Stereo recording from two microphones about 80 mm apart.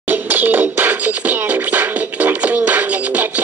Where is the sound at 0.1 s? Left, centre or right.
Right.